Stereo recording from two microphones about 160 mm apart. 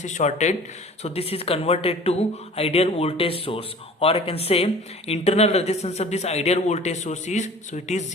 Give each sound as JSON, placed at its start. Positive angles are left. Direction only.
{"t": 0.0, "sound": "speech", "side_deg": 50}